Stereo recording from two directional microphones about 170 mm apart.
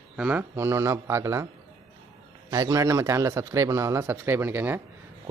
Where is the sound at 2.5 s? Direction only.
20° right (ahead or behind).